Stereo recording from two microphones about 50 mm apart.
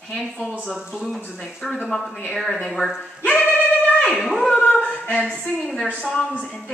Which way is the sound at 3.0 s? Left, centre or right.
Left.